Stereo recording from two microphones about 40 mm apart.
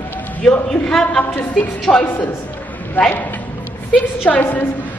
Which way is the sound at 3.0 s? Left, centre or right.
Left.